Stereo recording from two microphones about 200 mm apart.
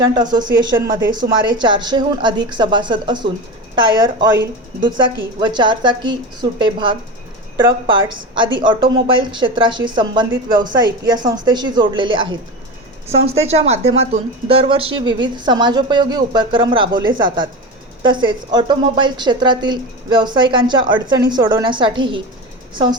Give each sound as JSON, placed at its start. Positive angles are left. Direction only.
{"t": 0.0, "sound": "a woman's voice", "side_deg": -20}